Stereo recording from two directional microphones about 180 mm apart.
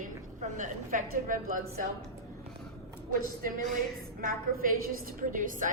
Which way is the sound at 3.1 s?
50° right (ahead or behind).